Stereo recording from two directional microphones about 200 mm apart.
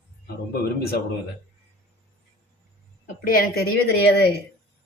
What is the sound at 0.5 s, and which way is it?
Speech, 50° left (ahead or behind).